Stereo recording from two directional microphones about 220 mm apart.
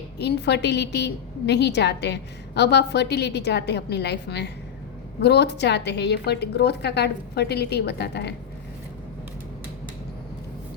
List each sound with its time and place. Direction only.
0.2 s a woman's voice: 50° left (ahead or behind)